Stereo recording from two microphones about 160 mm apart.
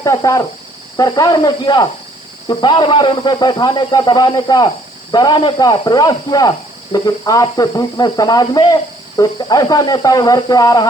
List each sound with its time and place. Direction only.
0.0 s speech: 20° left (ahead or behind)